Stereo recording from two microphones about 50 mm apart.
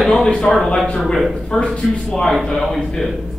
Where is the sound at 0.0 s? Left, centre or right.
Centre.